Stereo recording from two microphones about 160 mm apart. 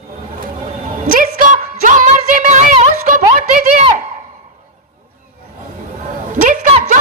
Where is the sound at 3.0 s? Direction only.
55° right (ahead or behind).